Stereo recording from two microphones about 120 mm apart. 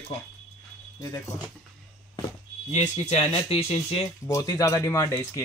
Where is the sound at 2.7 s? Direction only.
70° left (ahead or behind).